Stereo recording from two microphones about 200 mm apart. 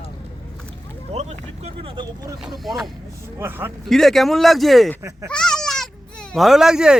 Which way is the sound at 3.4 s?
10° right (ahead or behind).